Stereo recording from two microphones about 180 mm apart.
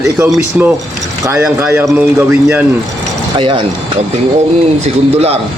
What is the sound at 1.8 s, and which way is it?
Speech, 5° right (ahead or behind).